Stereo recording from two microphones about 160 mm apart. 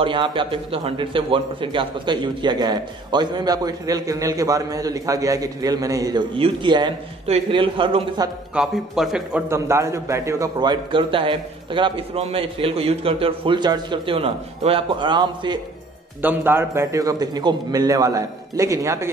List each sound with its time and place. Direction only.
0.0 s a man's voice: 30° right (ahead or behind)
8.5 s a man's voice: 5° right (ahead or behind)
9.5 s a man's voice: 15° right (ahead or behind)
16.2 s a man's voice: 10° right (ahead or behind)